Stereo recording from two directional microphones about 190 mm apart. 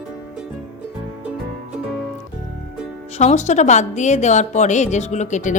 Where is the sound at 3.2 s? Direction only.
35° left (ahead or behind).